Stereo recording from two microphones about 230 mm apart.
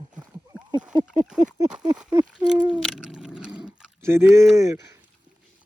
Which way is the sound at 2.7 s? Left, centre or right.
Centre.